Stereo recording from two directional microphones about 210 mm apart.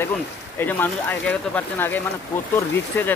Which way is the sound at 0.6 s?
10° left (ahead or behind).